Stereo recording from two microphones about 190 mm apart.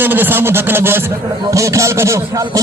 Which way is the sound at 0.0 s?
10° right (ahead or behind).